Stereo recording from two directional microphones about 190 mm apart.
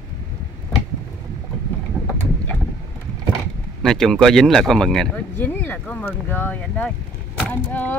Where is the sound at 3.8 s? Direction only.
Centre (ahead or behind).